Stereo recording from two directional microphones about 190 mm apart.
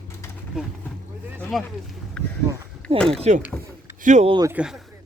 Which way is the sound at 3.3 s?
35° right (ahead or behind).